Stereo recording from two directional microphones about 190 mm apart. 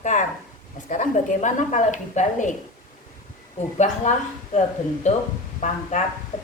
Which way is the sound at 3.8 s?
40° left (ahead or behind).